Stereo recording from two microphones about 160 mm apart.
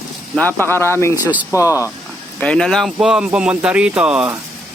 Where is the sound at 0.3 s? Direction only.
10° left (ahead or behind).